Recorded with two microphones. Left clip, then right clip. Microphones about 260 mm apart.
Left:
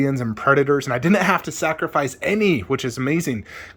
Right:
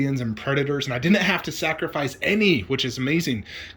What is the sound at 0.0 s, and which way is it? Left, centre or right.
Speech, centre.